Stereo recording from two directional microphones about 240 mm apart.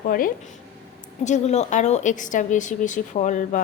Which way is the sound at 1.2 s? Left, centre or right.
Left.